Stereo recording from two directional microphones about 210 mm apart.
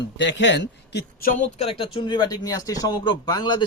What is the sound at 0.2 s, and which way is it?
A man's voice, 60° left (ahead or behind).